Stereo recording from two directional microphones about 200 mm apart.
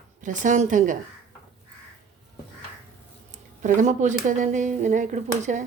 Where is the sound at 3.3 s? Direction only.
40° right (ahead or behind).